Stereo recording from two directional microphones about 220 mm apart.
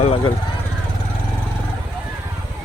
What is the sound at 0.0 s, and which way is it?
Speech, 25° left (ahead or behind).